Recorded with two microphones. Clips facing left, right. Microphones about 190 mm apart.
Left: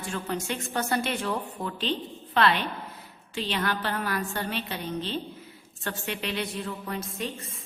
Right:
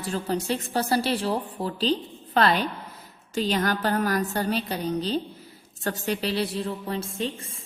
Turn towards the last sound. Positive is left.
turn(degrees=-30)  # may be behind; listen again after turning